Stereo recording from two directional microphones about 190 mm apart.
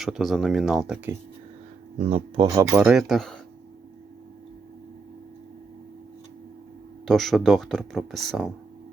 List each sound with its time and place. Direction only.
0.0 s speech: centre (ahead or behind)
2.0 s speech: 30° right (ahead or behind); by 2.9 s 15° right (ahead or behind)
2.9 s speech: centre (ahead or behind)
7.1 s speech: centre (ahead or behind)